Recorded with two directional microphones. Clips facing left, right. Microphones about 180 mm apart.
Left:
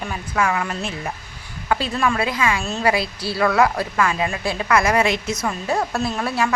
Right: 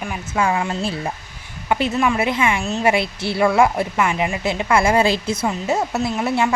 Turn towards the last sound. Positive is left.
turn(degrees=-20)  # may be behind; listen again after turning